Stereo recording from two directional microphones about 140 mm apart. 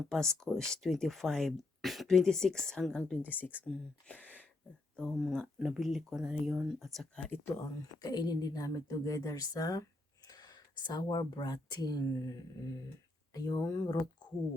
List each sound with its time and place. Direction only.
0.1 s speech: 5° left (ahead or behind)
8.0 s speech: 30° left (ahead or behind)